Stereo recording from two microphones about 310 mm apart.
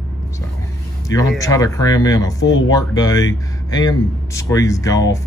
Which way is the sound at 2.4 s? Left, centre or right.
Left.